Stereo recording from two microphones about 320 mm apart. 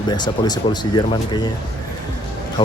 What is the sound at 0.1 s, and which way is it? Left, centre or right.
Speech, centre.